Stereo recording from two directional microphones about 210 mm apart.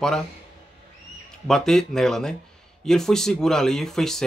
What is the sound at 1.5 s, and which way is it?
A man's voice, centre (ahead or behind).